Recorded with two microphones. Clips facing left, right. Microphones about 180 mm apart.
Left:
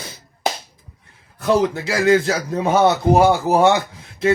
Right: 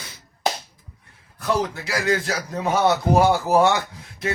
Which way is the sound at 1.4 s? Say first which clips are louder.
Left 6 dB; 25° left (ahead or behind).